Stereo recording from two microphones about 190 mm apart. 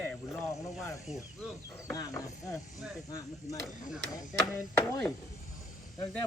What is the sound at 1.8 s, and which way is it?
Chopping, 15° left (ahead or behind).